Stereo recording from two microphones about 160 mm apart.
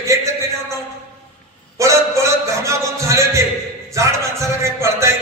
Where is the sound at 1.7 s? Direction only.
20° right (ahead or behind).